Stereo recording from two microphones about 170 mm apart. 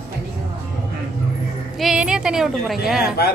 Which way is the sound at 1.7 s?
5° right (ahead or behind).